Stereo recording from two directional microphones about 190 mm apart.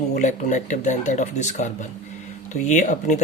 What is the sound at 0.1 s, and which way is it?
Speech, 40° left (ahead or behind).